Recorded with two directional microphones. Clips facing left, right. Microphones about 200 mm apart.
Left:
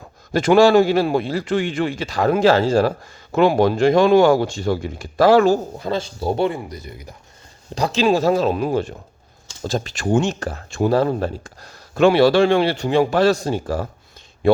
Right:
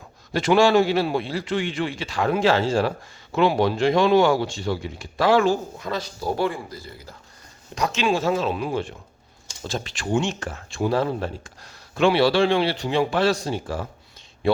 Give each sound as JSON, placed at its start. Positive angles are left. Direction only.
{"t": 0.3, "sound": "speech", "side_deg": 45}
{"t": 5.9, "sound": "speech", "side_deg": 25}
{"t": 7.8, "sound": "speech", "side_deg": 30}